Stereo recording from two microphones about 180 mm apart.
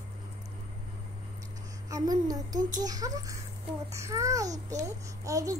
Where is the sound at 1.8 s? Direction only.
20° right (ahead or behind).